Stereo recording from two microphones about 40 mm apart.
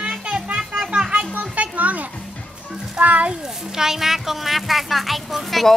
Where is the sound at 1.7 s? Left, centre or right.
Right.